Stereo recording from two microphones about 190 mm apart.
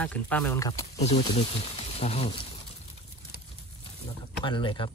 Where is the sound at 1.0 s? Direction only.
35° left (ahead or behind).